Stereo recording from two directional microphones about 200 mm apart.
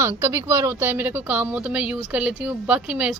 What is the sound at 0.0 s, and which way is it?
Speech, 15° right (ahead or behind).